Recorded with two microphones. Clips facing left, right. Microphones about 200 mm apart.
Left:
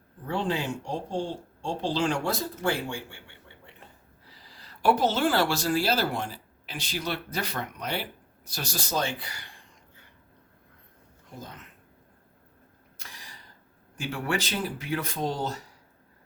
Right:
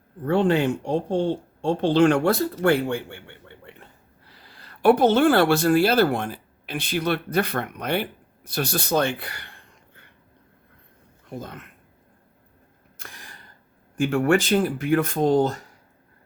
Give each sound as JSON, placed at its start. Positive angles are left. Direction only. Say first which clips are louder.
{"t": 0.3, "sound": "speech", "louder": "right 9 dB", "side_deg": -60}
{"t": 3.7, "sound": "a sound", "louder": "right 7 dB", "side_deg": -60}
{"t": 4.3, "sound": "speech", "louder": "right 2 dB", "side_deg": -60}
{"t": 11.3, "sound": "speech", "louder": "right 7 dB", "side_deg": -60}
{"t": 13.0, "sound": "gasp", "louder": "right 4 dB", "side_deg": -55}
{"t": 13.9, "sound": "speech", "louder": "right 11 dB", "side_deg": -50}